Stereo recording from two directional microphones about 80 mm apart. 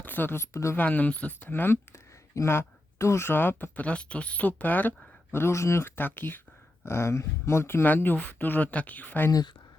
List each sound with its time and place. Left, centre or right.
0.0 s speech: left
0.8 s speech: centre
5.3 s speech: left